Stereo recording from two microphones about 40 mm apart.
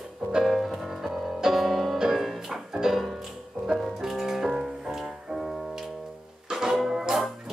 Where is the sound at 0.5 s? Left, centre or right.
Centre.